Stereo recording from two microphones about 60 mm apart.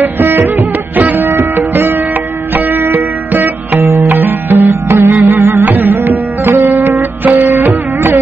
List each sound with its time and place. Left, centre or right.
0.0 s music: right
1.7 s sitar: right
2.5 s music: right
3.8 s music: right
4.1 s music: right